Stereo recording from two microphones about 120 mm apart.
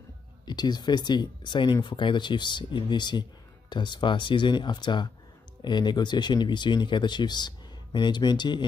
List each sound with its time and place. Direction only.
0.5 s speech: 35° left (ahead or behind)